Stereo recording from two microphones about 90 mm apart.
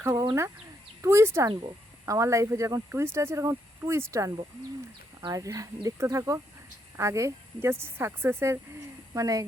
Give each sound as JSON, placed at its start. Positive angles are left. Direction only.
{"t": 0.0, "sound": "bird", "side_deg": -30}
{"t": 1.0, "sound": "speech", "side_deg": -30}
{"t": 9.1, "sound": "speech", "side_deg": -40}